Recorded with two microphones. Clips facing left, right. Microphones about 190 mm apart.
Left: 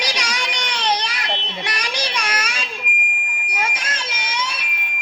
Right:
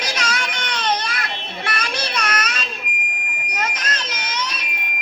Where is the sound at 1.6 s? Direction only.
15° left (ahead or behind).